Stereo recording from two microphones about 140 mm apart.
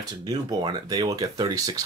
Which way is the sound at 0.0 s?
30° right (ahead or behind).